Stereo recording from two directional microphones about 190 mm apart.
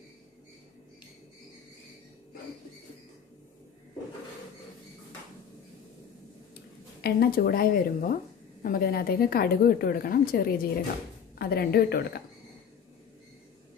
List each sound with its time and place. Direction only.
7.0 s a woman's voice: 50° left (ahead or behind)